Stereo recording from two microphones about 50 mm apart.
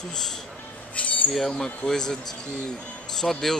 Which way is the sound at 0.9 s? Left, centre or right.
Left.